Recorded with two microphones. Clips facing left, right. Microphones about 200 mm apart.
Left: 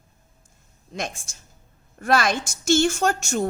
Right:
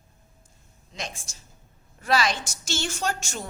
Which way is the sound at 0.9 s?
50° left (ahead or behind).